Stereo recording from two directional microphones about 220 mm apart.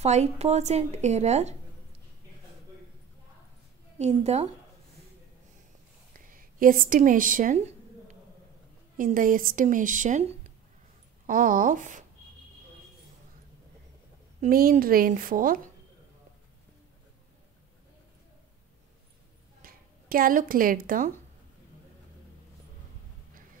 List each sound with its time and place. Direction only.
0.0 s speech: 30° right (ahead or behind)
4.0 s speech: 30° right (ahead or behind)
6.2 s a sound: 40° right (ahead or behind)
8.9 s speech: 40° right (ahead or behind)
14.4 s speech: 40° right (ahead or behind)
19.6 s speech: 40° right (ahead or behind)